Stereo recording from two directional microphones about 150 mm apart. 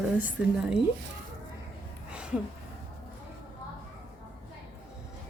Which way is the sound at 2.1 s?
5° right (ahead or behind).